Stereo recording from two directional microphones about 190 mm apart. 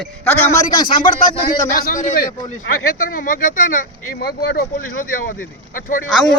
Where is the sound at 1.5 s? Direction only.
45° left (ahead or behind).